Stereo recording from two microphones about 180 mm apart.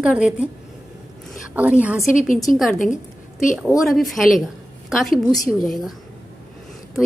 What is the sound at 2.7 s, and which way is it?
Speech, 45° left (ahead or behind).